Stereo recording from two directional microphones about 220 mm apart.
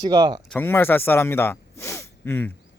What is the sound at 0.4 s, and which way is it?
Speech, 5° left (ahead or behind).